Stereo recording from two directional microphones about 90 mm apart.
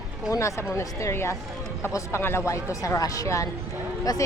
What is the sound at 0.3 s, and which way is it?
Speech, 35° left (ahead or behind).